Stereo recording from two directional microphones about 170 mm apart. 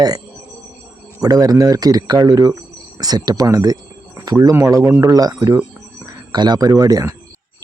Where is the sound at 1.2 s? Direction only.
20° right (ahead or behind).